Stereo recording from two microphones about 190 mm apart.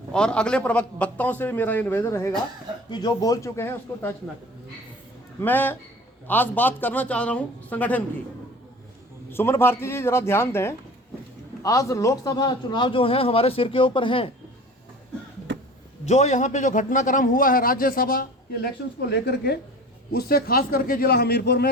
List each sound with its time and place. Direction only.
0.1 s a man's voice: 5° left (ahead or behind)
5.4 s a man's voice: 10° left (ahead or behind)
9.3 s a man's voice: 10° left (ahead or behind)
16.0 s a man's voice: 35° left (ahead or behind); by 21.7 s 60° left (ahead or behind)